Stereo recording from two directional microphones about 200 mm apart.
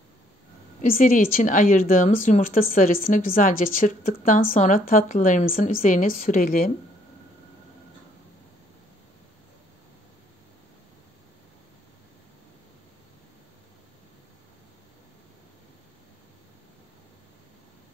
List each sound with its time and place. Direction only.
0.8 s a woman's voice: 45° left (ahead or behind)